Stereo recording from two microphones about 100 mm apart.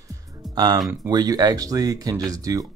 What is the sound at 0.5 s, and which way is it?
Speech, 40° right (ahead or behind).